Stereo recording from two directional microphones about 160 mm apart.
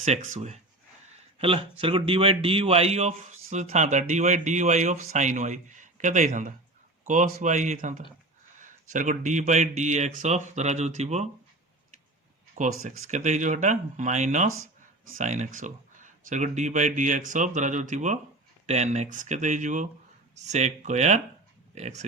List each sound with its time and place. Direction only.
0.0 s speech: 50° right (ahead or behind)
1.0 s a sound: 40° right (ahead or behind)
1.8 s speech: 35° right (ahead or behind)
12.5 s speech: 55° right (ahead or behind)